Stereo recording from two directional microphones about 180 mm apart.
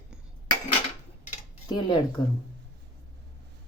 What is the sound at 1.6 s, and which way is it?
Speech, 25° left (ahead or behind).